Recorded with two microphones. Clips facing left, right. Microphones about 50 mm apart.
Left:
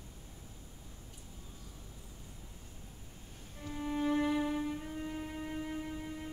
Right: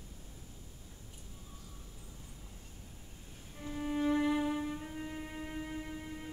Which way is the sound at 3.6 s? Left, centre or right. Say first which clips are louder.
Right 1 dB; centre.